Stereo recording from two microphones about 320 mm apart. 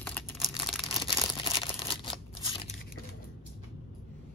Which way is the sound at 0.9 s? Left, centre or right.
Centre.